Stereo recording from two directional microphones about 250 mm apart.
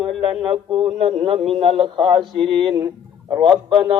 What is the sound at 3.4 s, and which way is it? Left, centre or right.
Speech, centre.